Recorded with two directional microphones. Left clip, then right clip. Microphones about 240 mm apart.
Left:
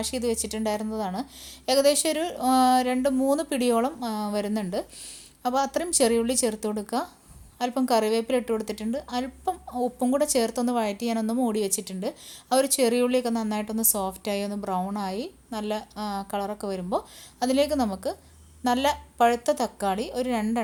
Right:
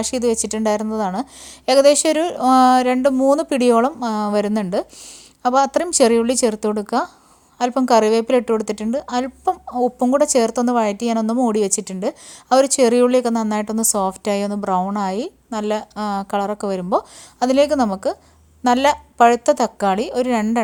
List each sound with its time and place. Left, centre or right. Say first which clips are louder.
0.0 s a woman's voice: right 8 dB; right